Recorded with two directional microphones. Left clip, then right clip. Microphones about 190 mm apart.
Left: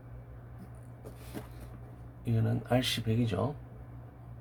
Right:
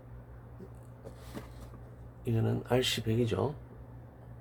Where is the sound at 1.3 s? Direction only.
20° left (ahead or behind).